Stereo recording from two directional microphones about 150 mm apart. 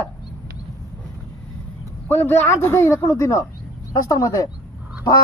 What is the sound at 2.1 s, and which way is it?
Speech, 15° left (ahead or behind).